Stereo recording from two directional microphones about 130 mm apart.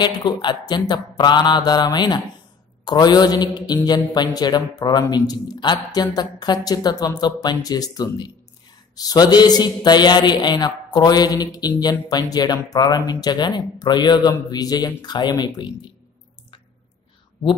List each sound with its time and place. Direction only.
0.0 s speech: 35° left (ahead or behind)